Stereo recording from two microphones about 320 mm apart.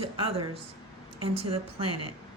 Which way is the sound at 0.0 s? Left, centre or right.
Centre.